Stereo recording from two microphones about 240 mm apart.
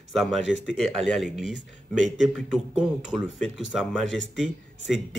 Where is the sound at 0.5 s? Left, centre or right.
Left.